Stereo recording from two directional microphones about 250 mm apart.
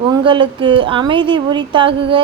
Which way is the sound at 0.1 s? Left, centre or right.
Centre.